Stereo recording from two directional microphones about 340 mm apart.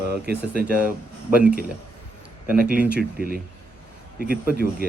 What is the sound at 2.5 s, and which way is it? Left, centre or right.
Speech, centre.